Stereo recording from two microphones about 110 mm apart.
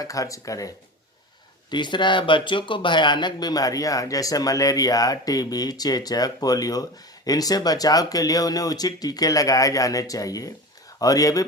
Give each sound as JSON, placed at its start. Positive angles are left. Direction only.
{"t": 0.0, "sound": "speech", "side_deg": 30}
{"t": 1.7, "sound": "speech", "side_deg": 45}